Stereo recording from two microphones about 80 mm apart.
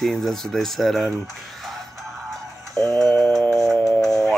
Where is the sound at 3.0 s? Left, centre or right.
Left.